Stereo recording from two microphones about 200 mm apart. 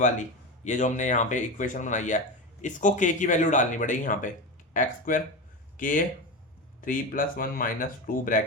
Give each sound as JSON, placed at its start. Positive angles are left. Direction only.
{"t": 0.6, "sound": "speech", "side_deg": 35}